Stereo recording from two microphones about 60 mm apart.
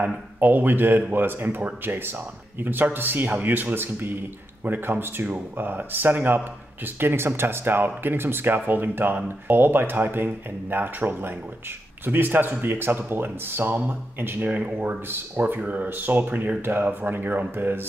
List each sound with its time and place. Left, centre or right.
0.0 s speech: right